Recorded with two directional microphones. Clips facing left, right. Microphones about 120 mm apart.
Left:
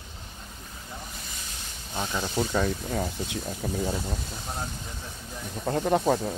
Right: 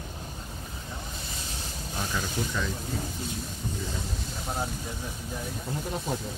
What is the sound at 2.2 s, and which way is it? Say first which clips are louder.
Speech: left 7 dB; 50° left (ahead or behind).